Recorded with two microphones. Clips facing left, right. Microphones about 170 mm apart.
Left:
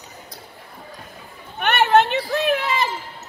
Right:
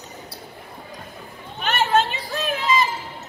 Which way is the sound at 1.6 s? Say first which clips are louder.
Left 4 dB; 65° left (ahead or behind).